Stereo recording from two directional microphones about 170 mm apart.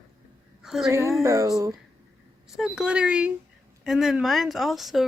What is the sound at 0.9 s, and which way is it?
Speech, 15° right (ahead or behind).